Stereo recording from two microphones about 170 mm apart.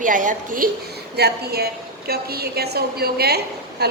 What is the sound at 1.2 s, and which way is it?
A woman's voice, 70° right (ahead or behind).